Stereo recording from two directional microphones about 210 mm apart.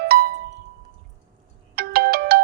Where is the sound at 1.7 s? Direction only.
45° right (ahead or behind).